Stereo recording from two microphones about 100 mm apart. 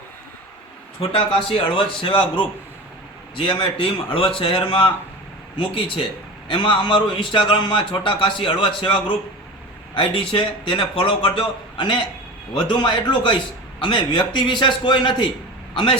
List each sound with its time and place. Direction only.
1.1 s speech: 10° left (ahead or behind)
1.5 s a man's voice: 60° left (ahead or behind)